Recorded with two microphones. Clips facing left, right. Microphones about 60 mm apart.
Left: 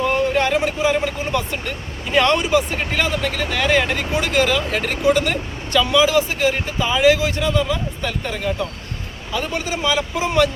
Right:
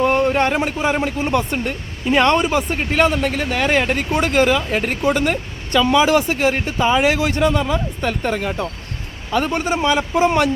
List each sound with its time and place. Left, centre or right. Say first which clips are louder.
0.0 s a sound: right 2 dB; right
0.6 s speech: even; right
2.0 s speech: right 2 dB; right
4.4 s speech: right 2 dB; right
5.9 s speech: right 2 dB; right